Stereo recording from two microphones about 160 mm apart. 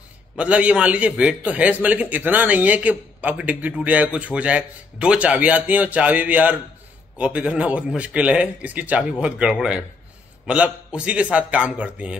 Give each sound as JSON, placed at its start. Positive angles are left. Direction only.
{"t": 0.4, "sound": "a man's voice", "side_deg": -10}